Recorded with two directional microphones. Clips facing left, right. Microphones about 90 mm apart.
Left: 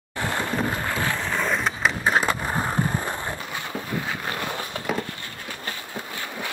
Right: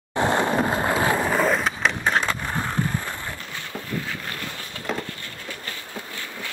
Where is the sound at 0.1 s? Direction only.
25° right (ahead or behind).